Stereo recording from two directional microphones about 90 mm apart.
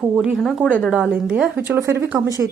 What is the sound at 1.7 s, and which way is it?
Speech, 30° right (ahead or behind).